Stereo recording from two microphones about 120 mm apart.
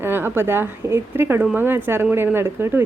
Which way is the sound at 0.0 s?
20° right (ahead or behind).